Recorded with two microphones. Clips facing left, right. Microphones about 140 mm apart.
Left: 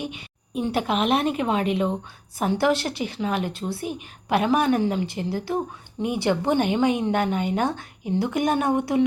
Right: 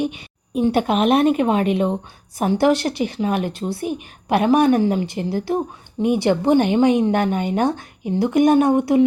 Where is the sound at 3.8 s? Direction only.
45° right (ahead or behind).